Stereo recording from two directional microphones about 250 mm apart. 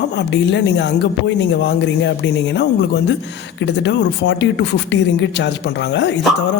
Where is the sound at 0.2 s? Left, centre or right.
Left.